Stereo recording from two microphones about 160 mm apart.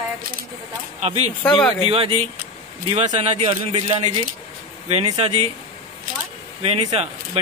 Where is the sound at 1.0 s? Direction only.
40° right (ahead or behind).